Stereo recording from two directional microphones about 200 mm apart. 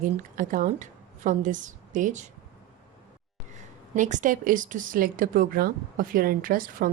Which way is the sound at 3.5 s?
40° right (ahead or behind).